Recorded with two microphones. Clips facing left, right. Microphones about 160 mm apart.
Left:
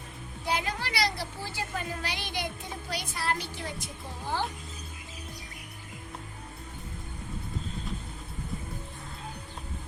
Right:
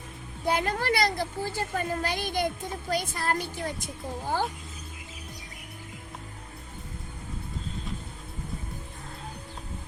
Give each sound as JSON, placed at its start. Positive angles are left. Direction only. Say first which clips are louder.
{"t": 0.4, "sound": "speech", "louder": "right 5 dB", "side_deg": -50}